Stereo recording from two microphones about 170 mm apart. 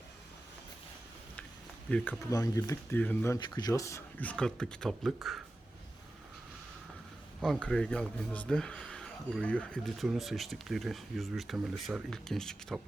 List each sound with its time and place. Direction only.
1.9 s speech: 5° left (ahead or behind)
2.3 s speech: 20° left (ahead or behind)
3.3 s speech: 25° left (ahead or behind); by 5.4 s centre (ahead or behind)
7.4 s speech: 5° left (ahead or behind)